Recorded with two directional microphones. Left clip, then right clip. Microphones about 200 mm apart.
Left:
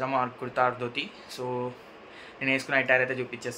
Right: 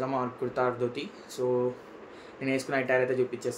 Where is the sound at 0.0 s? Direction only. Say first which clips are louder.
Left 2 dB; 5° right (ahead or behind).